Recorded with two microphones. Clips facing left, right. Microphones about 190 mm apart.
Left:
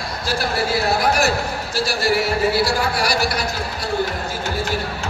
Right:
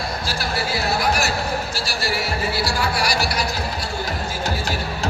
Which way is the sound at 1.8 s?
55° left (ahead or behind).